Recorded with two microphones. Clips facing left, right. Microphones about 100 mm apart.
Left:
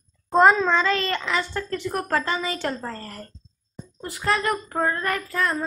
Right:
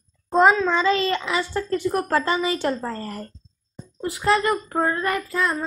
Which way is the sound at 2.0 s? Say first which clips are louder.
Right 1 dB; 20° right (ahead or behind).